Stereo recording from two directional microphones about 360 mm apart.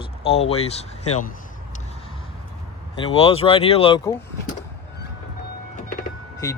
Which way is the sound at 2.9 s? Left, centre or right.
Centre.